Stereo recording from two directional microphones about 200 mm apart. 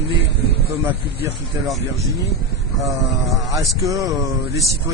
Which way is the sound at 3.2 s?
Centre (ahead or behind).